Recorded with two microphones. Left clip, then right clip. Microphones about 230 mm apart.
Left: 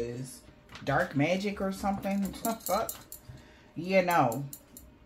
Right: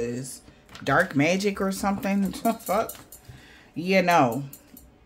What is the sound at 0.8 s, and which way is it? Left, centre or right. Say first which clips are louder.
Speech: right 6 dB; right.